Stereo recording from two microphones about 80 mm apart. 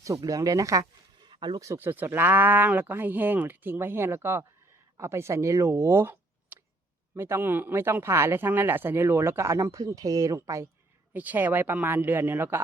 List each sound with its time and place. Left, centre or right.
0.3 s speech: right
1.2 s a sound: right
1.8 s speech: right
11.1 s speech: right